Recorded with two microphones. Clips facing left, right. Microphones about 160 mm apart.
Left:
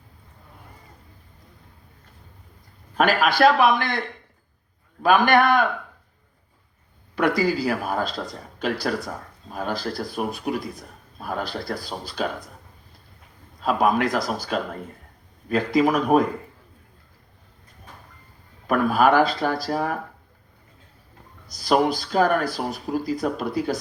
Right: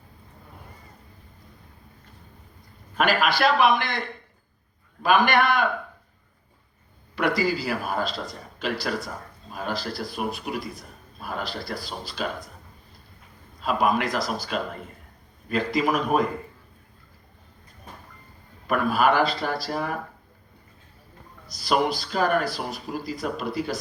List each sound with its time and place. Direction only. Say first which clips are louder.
3.0 s a man's voice: left 4 dB; 50° left (ahead or behind)
5.0 s a man's voice: left 3 dB; 50° left (ahead or behind)
7.2 s a man's voice: left 3 dB; 50° left (ahead or behind)
13.6 s a man's voice: left 3 dB; 45° left (ahead or behind)
15.5 s a man's voice: left 4 dB; 50° left (ahead or behind)
18.7 s a man's voice: left 3 dB; 50° left (ahead or behind)
21.4 s a man's voice: left 3 dB; 50° left (ahead or behind)